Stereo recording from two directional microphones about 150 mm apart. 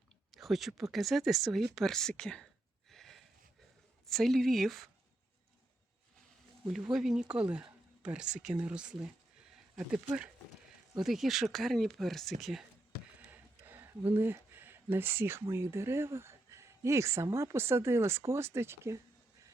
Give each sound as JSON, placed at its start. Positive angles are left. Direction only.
{"t": 0.3, "sound": "speech", "side_deg": 0}
{"t": 2.9, "sound": "a sound", "side_deg": 0}
{"t": 4.0, "sound": "speech", "side_deg": 5}
{"t": 6.7, "sound": "speech", "side_deg": -5}
{"t": 13.7, "sound": "speech", "side_deg": -10}